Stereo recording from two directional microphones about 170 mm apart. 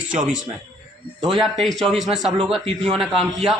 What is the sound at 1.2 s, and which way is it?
A man's voice, centre (ahead or behind).